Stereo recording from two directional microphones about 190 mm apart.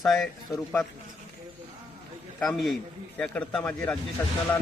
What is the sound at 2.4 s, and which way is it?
A man's voice, centre (ahead or behind).